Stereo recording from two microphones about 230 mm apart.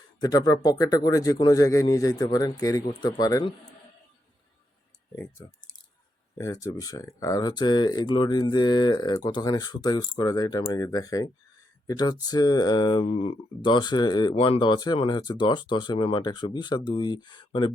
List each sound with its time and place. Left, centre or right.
0.2 s speech: centre
5.4 s speech: centre